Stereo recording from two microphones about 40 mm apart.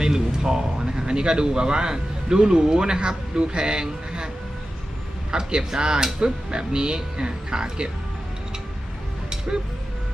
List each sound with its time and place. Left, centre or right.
0.0 s speech: centre
5.3 s speech: right